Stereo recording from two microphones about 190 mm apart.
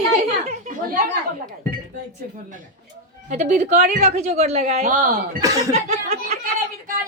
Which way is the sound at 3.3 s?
40° right (ahead or behind).